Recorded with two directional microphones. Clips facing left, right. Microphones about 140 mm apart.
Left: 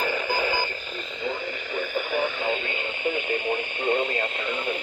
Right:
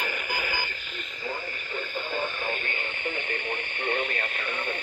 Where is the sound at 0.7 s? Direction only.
35° left (ahead or behind).